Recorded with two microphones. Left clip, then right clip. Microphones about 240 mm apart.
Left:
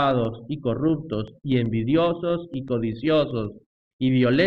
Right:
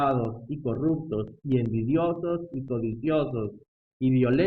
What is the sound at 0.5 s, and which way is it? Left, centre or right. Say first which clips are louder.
A man's voice: left 3 dB; left.